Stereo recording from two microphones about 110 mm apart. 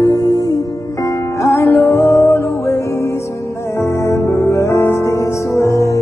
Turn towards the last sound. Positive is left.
turn(degrees=30)  # may be behind; listen again after turning